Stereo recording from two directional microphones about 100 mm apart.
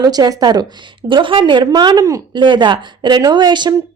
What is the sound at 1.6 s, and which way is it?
Speech, 40° right (ahead or behind).